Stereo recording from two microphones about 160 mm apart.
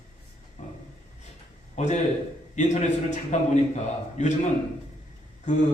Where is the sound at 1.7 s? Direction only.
45° left (ahead or behind).